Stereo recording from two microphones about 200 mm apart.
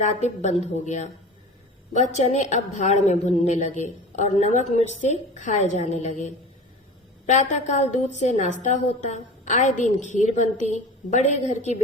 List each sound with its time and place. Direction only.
0.0 s a woman's voice: 35° left (ahead or behind)